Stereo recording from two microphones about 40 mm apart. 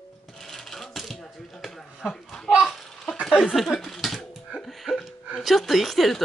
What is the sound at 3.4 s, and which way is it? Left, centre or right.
Laughter, centre.